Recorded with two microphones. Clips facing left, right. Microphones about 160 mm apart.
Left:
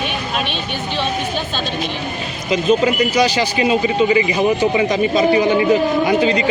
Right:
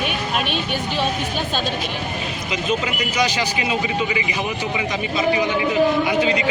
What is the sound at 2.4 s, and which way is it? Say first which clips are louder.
Speech: left 9 dB; 35° left (ahead or behind).